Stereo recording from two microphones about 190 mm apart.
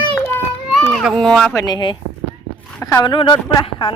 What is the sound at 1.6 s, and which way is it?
Speech, 20° left (ahead or behind).